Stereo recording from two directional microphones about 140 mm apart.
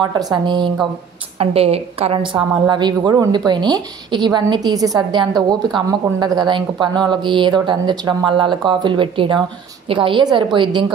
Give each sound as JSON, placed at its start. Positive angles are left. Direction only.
{"t": 0.0, "sound": "speech", "side_deg": -30}
{"t": 1.4, "sound": "a woman's voice", "side_deg": -45}
{"t": 2.7, "sound": "speech", "side_deg": -30}